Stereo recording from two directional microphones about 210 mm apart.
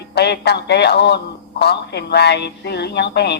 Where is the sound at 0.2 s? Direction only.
50° left (ahead or behind).